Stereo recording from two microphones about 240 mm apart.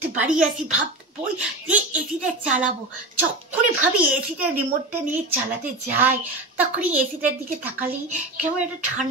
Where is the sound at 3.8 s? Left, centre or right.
Centre.